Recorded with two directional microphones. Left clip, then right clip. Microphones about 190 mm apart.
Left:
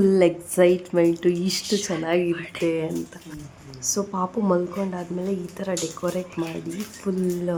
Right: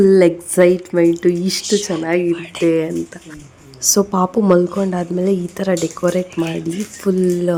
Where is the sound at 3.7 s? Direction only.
40° right (ahead or behind).